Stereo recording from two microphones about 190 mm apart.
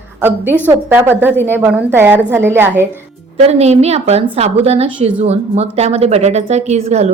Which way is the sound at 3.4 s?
35° right (ahead or behind).